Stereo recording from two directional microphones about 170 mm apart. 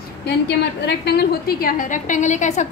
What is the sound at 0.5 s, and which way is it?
A woman's voice, 75° left (ahead or behind).